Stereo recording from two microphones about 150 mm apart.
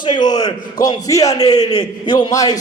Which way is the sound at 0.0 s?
30° left (ahead or behind).